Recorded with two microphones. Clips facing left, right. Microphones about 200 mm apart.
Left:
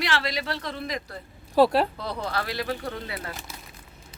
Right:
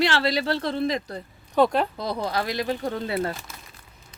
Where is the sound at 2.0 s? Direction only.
15° right (ahead or behind).